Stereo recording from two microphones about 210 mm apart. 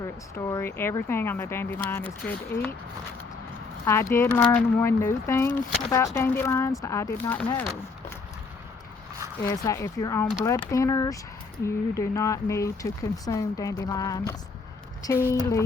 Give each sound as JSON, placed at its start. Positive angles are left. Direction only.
{"t": 0.0, "sound": "speech", "side_deg": 15}
{"t": 3.8, "sound": "speech", "side_deg": 10}
{"t": 9.4, "sound": "speech", "side_deg": 15}